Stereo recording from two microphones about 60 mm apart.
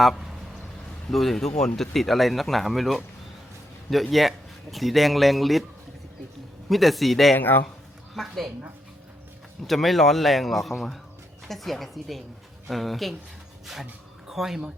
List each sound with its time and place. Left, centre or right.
1.1 s speech: centre
4.1 s speech: centre
6.7 s speech: centre
7.3 s speech: left
8.1 s speech: centre
9.6 s speech: centre
14.3 s speech: centre